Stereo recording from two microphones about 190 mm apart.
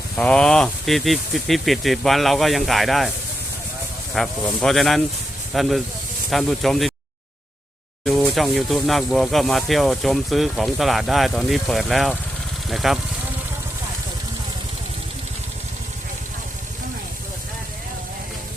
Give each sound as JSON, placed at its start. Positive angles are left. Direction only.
{"t": 0.2, "sound": "speech", "side_deg": 5}
{"t": 4.1, "sound": "speech", "side_deg": 0}
{"t": 8.0, "sound": "speech", "side_deg": 0}